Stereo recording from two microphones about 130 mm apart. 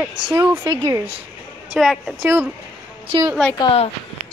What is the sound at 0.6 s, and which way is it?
Speech, 25° right (ahead or behind).